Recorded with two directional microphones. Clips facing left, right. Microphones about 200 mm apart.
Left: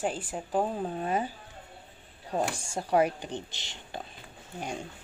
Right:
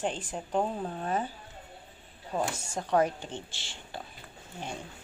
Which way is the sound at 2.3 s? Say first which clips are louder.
Left 1 dB; 10° left (ahead or behind).